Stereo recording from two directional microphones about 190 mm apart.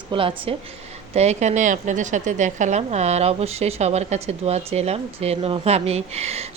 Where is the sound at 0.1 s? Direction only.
30° right (ahead or behind).